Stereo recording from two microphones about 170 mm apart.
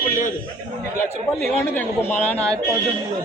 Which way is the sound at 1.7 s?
10° left (ahead or behind).